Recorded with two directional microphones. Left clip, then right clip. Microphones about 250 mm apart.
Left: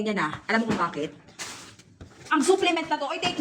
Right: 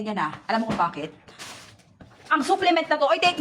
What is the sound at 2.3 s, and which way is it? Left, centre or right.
Speech, right.